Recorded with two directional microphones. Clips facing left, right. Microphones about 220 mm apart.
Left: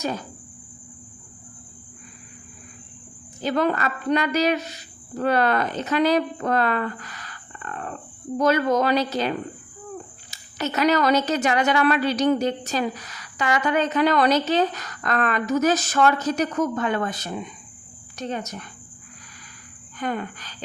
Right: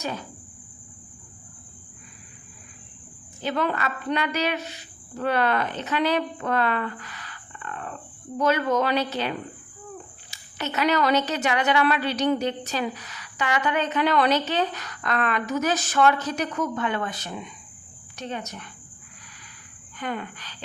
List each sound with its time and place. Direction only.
3.4 s a woman's voice: 40° left (ahead or behind)
10.3 s a woman's voice: 40° left (ahead or behind)
20.0 s a woman's voice: 45° left (ahead or behind)